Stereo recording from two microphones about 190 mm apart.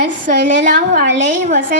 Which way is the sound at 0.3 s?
45° right (ahead or behind).